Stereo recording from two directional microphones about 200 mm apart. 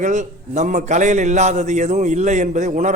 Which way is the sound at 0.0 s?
40° right (ahead or behind).